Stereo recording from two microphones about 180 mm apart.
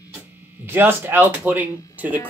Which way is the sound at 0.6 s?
10° right (ahead or behind).